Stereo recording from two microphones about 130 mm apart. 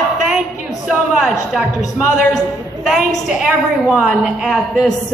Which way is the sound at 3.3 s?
5° right (ahead or behind).